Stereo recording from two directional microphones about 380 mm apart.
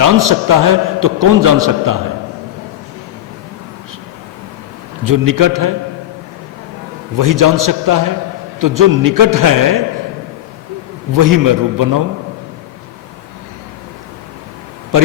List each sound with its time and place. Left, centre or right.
0.0 s a man's voice: right
5.0 s a man's voice: right
7.2 s a man's voice: right
11.1 s a man's voice: right